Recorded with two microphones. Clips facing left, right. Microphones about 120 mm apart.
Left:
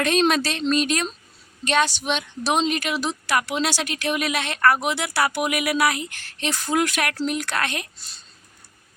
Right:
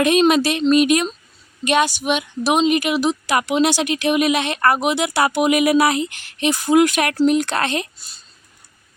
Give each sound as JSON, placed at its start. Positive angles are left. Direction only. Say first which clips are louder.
{"t": 0.0, "sound": "a woman's voice", "louder": "right 5 dB", "side_deg": -10}